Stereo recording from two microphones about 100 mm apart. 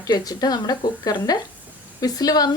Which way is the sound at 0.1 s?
40° left (ahead or behind).